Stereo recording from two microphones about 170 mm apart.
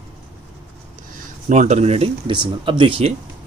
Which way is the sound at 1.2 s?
50° right (ahead or behind).